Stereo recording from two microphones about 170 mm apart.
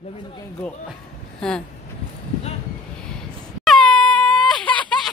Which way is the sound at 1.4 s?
5° left (ahead or behind).